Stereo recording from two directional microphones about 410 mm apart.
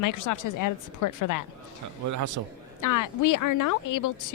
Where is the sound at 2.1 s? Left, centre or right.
Right.